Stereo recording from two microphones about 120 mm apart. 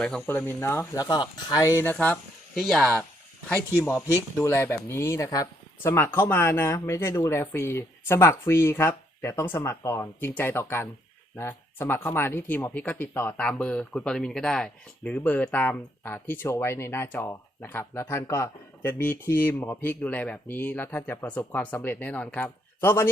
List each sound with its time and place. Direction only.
0.3 s speech: 15° left (ahead or behind)
2.6 s speech: centre (ahead or behind)
3.8 s speech: 20° left (ahead or behind)